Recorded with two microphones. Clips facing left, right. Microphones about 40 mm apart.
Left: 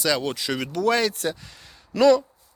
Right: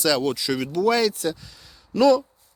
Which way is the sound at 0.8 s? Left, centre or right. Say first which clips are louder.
Right 1 dB; left.